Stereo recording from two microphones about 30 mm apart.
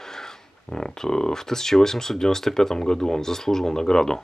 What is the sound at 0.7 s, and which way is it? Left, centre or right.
Speech, left.